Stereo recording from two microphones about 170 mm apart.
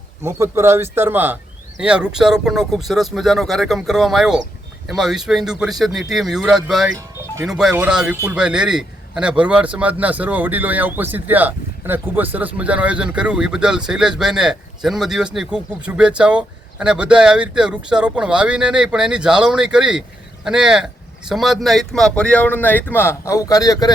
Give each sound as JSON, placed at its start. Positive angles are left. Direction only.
{"t": 0.2, "sound": "a man's voice", "side_deg": -15}